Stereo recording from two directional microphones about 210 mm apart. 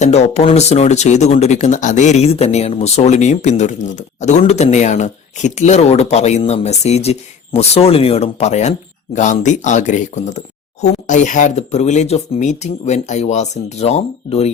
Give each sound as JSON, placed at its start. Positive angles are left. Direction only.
{"t": 0.0, "sound": "speech", "side_deg": 30}